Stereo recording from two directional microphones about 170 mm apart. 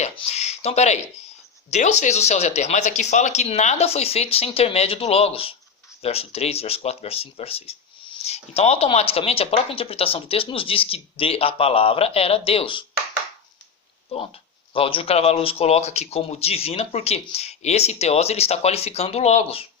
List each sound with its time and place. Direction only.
0.0 s a sound: 40° left (ahead or behind)
1.7 s speech: 45° left (ahead or behind)
14.1 s speech: 35° left (ahead or behind)